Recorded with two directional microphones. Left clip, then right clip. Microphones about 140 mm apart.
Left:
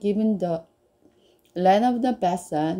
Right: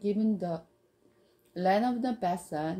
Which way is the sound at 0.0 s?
30° left (ahead or behind).